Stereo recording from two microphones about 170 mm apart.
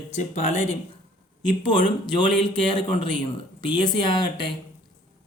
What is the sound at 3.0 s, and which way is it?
Speech, 30° left (ahead or behind).